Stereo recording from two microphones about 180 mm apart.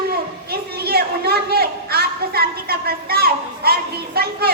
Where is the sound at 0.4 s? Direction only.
60° right (ahead or behind).